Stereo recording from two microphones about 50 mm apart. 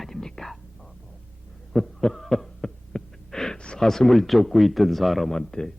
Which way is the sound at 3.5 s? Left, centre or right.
Centre.